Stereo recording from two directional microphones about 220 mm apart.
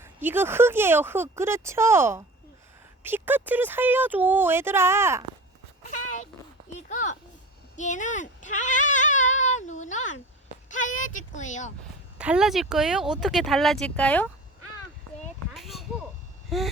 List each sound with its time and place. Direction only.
0.0 s speech: 10° right (ahead or behind)
5.8 s a sound: 35° left (ahead or behind)
6.8 s speech: 35° left (ahead or behind)
12.1 s speech: 5° right (ahead or behind)
15.2 s a sound: centre (ahead or behind)
16.5 s speech: centre (ahead or behind)